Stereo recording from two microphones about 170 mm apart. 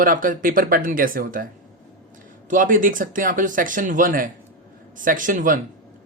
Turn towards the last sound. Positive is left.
turn(degrees=-50)  # may be behind; listen again after turning